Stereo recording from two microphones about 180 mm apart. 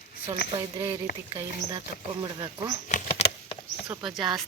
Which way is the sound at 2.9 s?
35° left (ahead or behind).